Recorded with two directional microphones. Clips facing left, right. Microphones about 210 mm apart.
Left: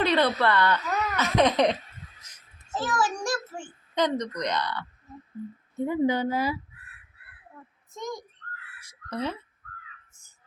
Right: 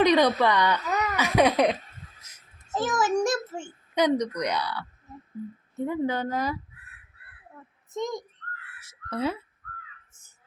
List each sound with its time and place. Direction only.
0.0 s speech: 15° right (ahead or behind)
2.7 s a child's voice: 20° right (ahead or behind)
3.9 s speech: 10° right (ahead or behind)
5.7 s a woman's voice: centre (ahead or behind)
7.9 s a child's voice: 20° right (ahead or behind)
8.8 s a sound: 5° right (ahead or behind)